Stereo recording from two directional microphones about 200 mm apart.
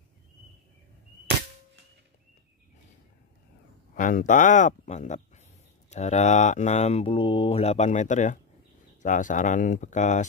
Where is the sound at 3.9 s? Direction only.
40° left (ahead or behind).